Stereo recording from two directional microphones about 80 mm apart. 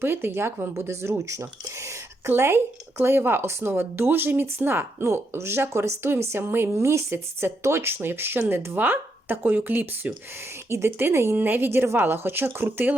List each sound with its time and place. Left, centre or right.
0.0 s speech: right
10.7 s speech: right